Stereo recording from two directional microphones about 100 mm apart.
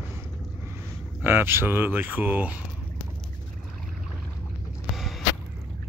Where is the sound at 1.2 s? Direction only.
20° right (ahead or behind).